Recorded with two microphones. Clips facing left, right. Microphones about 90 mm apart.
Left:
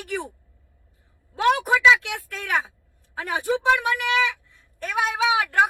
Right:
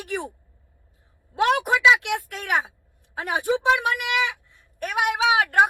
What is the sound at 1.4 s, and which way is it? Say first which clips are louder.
Speech: left 1 dB; 15° right (ahead or behind).